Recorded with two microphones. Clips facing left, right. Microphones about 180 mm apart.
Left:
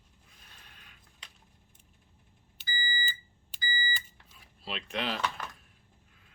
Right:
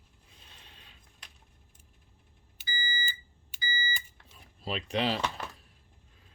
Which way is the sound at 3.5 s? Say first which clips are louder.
Even; 20° right (ahead or behind).